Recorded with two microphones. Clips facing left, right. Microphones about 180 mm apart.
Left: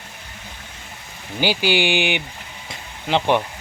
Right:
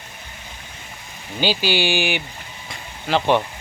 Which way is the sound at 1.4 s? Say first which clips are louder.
Left 1 dB; 15° left (ahead or behind).